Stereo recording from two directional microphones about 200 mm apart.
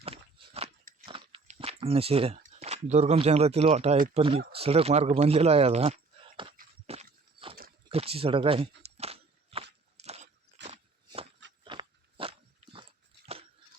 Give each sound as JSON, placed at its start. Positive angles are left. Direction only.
{"t": 0.0, "sound": "walk", "side_deg": -30}
{"t": 1.0, "sound": "biting", "side_deg": -25}
{"t": 2.4, "sound": "speech", "side_deg": -35}
{"t": 6.8, "sound": "a sound", "side_deg": -30}
{"t": 7.9, "sound": "walk", "side_deg": -30}
{"t": 10.0, "sound": "a sound", "side_deg": -35}